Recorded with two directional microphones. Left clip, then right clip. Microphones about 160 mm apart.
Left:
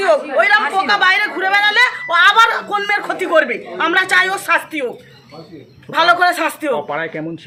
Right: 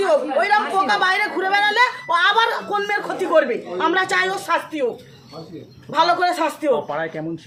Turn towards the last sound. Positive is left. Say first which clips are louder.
# left 3 dB
turn(degrees=75)  # may be behind; listen again after turning